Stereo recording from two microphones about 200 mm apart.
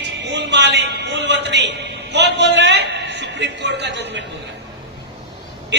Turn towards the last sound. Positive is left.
turn(degrees=-60)  # may be behind; listen again after turning